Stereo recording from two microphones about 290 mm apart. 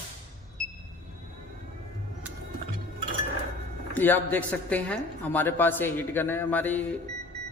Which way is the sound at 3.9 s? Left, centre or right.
Centre.